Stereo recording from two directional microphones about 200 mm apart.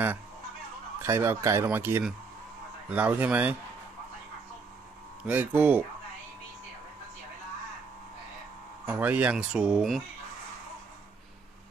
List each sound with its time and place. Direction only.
0.9 s speech: 10° right (ahead or behind)
5.2 s speech: 10° right (ahead or behind)
8.9 s speech: 10° right (ahead or behind)